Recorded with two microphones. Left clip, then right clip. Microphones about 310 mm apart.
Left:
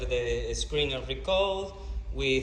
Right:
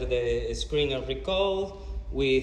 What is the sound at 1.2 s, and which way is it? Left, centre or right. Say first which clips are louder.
Speech: even; centre.